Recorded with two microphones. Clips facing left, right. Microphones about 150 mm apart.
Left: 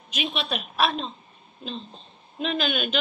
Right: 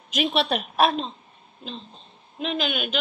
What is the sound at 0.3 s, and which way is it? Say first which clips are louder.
Speech: right 8 dB; 75° right (ahead or behind).